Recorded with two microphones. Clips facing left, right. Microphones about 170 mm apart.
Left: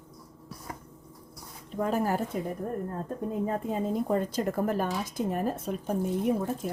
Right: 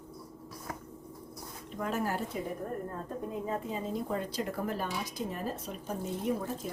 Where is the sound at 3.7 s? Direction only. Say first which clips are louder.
Left 6 dB; 50° left (ahead or behind).